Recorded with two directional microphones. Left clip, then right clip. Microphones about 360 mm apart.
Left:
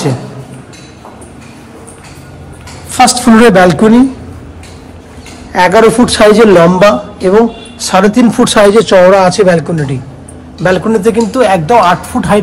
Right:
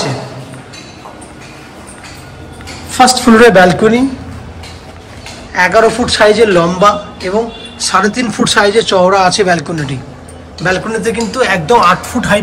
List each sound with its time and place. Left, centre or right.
2.9 s a woman's voice: centre
3.3 s speech: left
5.5 s speech: centre